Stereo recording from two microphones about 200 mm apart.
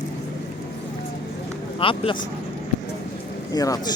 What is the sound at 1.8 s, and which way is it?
Speech, 25° left (ahead or behind).